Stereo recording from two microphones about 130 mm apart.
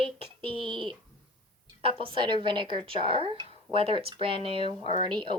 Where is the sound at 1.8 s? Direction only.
45° right (ahead or behind).